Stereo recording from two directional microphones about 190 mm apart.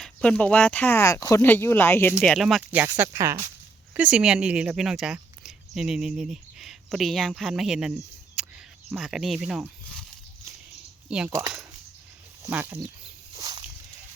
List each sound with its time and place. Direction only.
0.0 s speech: 5° left (ahead or behind)
2.1 s speech: centre (ahead or behind)
8.4 s a sound: 5° right (ahead or behind)
8.9 s speech: 5° right (ahead or behind)
11.3 s speech: 15° right (ahead or behind)
13.3 s walk: 20° right (ahead or behind)